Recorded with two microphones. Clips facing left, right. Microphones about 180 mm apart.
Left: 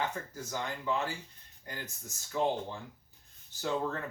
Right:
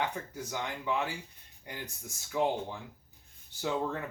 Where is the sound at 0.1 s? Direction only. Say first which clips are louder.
Right 1 dB; 15° right (ahead or behind).